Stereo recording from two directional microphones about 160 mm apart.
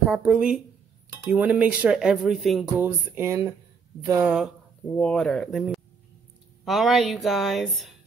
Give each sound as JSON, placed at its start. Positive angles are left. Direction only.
{"t": 0.0, "sound": "speech", "side_deg": -5}
{"t": 2.8, "sound": "a sound", "side_deg": -15}
{"t": 4.2, "sound": "speech", "side_deg": -5}
{"t": 4.8, "sound": "speech", "side_deg": 5}